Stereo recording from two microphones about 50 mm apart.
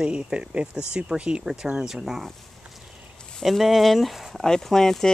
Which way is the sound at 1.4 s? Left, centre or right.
Centre.